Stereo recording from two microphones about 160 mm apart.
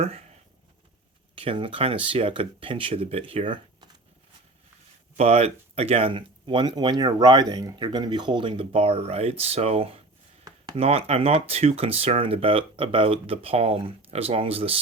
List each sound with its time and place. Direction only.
0.0 s speech: 40° right (ahead or behind)
1.4 s speech: 35° right (ahead or behind)
5.1 s speech: 40° right (ahead or behind)